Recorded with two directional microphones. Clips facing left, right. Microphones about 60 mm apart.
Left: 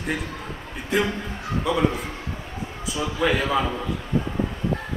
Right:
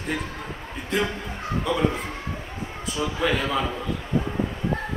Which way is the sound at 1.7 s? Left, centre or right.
Centre.